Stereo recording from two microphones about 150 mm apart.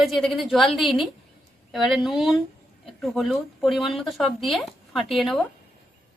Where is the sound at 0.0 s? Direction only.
Centre (ahead or behind).